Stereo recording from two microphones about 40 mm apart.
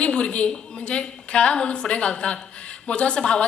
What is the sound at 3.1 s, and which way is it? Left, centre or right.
Speech, centre.